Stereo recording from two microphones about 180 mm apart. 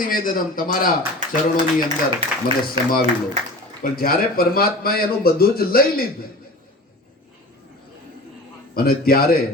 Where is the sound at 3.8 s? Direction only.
55° left (ahead or behind).